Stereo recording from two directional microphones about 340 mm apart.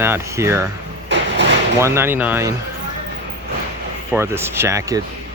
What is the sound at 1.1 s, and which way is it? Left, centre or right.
Vehicle, right.